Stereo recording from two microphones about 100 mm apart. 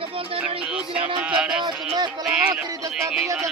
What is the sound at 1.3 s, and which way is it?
Speech, 10° right (ahead or behind).